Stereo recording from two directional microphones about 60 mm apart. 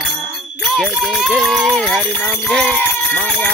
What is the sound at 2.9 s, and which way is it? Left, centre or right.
Speech, left.